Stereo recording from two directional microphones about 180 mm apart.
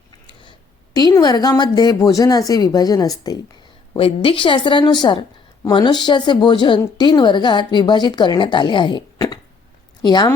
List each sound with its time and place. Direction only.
0.9 s a woman's voice: 20° left (ahead or behind)
3.9 s a woman's voice: 30° left (ahead or behind)